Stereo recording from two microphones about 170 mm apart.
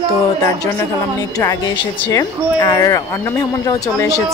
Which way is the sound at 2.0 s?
20° left (ahead or behind).